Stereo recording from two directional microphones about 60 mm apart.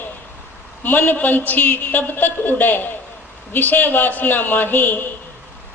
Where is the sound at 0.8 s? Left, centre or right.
Left.